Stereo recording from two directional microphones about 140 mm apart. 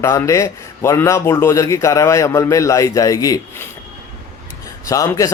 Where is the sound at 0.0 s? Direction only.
20° left (ahead or behind).